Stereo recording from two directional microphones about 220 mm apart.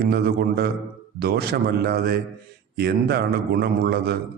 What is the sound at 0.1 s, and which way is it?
A man's voice, 45° right (ahead or behind).